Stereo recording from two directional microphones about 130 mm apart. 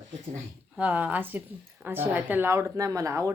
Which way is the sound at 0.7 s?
10° right (ahead or behind).